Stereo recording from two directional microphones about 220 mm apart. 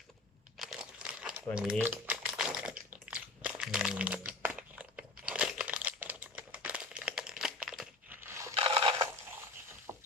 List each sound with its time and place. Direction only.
0.5 s crumpling: centre (ahead or behind)
8.5 s a sound: 25° right (ahead or behind)
9.9 s rowboat: 10° right (ahead or behind)